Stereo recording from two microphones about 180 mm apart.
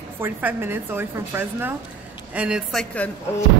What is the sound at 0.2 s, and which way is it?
A woman's voice, 10° right (ahead or behind).